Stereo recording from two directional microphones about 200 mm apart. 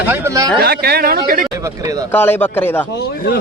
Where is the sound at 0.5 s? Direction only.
50° right (ahead or behind).